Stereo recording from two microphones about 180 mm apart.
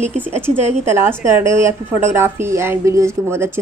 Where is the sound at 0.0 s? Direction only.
40° right (ahead or behind).